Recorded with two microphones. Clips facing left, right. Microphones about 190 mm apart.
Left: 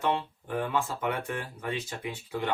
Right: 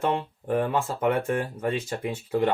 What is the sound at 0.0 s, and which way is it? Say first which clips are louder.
Speech: right 3 dB; 45° right (ahead or behind).